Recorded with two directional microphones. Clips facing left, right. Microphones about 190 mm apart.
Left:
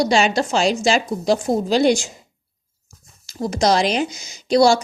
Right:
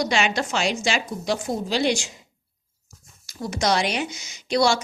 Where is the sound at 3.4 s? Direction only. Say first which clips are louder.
Left 5 dB; 35° left (ahead or behind).